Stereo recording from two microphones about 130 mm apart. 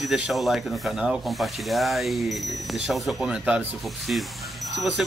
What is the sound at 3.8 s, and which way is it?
Speech, centre (ahead or behind).